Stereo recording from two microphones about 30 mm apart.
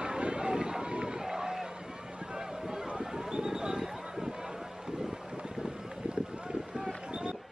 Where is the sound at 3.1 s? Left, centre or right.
Right.